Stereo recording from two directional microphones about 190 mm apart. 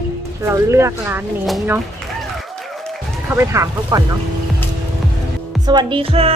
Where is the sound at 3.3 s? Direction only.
15° right (ahead or behind).